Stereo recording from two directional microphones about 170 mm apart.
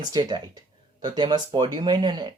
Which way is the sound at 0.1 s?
25° right (ahead or behind).